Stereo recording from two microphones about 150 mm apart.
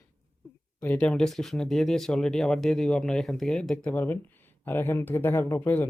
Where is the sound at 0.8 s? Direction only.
10° left (ahead or behind).